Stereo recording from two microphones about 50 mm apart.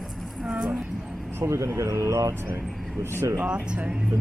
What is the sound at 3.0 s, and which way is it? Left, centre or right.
Speech, right.